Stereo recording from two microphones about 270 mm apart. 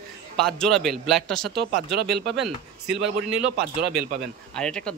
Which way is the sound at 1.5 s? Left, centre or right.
Right.